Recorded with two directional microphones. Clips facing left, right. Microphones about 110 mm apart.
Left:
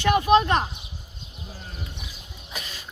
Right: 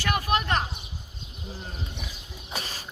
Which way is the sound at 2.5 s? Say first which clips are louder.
Right 2 dB; 35° right (ahead or behind).